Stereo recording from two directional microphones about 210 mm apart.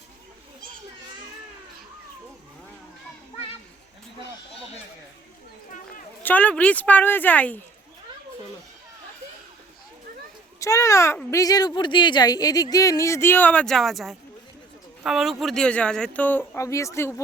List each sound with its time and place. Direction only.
5.7 s a sound: 40° left (ahead or behind)
6.2 s speech: 5° left (ahead or behind)
10.6 s speech: 15° left (ahead or behind)